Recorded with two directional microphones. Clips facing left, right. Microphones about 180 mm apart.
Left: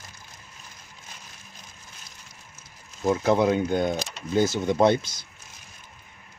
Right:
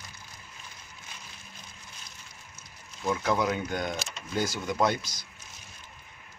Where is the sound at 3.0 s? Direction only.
35° left (ahead or behind).